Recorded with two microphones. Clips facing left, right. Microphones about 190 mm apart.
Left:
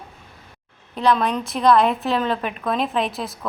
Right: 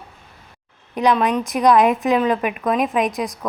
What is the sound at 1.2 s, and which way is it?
A woman's voice, 5° right (ahead or behind).